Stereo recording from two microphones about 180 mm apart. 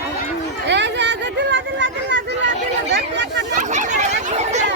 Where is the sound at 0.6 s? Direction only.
75° right (ahead or behind).